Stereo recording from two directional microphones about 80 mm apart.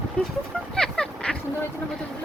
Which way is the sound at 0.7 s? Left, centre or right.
Centre.